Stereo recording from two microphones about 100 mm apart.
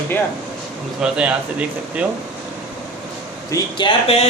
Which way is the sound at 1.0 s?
10° right (ahead or behind).